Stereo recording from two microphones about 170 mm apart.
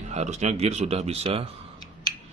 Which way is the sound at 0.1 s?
40° right (ahead or behind).